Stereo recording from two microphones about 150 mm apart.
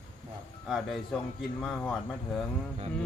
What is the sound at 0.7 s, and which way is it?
Speech, centre (ahead or behind).